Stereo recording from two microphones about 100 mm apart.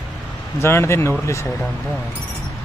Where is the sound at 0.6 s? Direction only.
25° left (ahead or behind).